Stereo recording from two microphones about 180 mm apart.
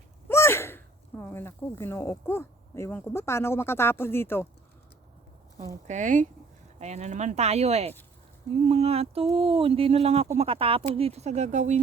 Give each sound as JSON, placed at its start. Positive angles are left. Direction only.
{"t": 0.3, "sound": "speech", "side_deg": 15}
{"t": 5.9, "sound": "speech", "side_deg": -45}